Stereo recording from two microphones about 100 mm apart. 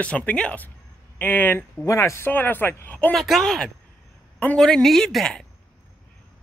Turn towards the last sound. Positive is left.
turn(degrees=5)  # may be behind; listen again after turning